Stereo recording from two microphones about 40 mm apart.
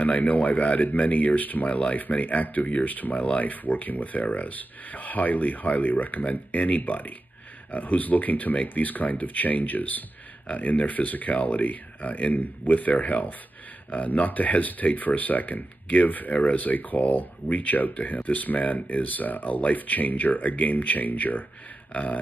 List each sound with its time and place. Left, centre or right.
0.0 s speech: left
1.7 s speech: left
2.0 s speech: left